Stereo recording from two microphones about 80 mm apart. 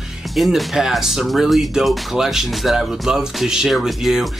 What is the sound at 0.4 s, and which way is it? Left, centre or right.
Speech, centre.